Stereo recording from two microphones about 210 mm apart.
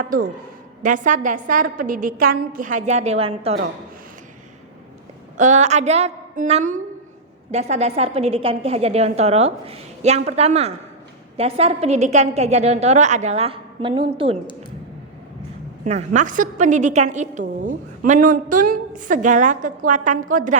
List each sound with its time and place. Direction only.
0.1 s a woman's voice: 40° right (ahead or behind)
5.4 s a woman's voice: 35° right (ahead or behind)
15.8 s a woman's voice: 35° right (ahead or behind)